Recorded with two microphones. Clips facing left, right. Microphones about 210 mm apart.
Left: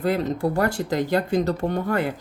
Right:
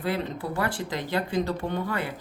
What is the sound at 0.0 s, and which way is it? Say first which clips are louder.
Speech: left 7 dB; 40° left (ahead or behind).